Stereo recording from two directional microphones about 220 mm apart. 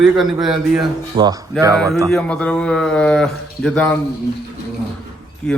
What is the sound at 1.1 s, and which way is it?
Speech, 20° right (ahead or behind).